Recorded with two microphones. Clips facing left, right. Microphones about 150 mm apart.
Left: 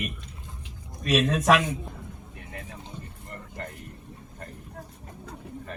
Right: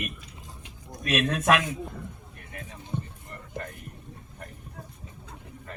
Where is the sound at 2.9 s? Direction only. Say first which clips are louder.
Right 11 dB; 55° right (ahead or behind).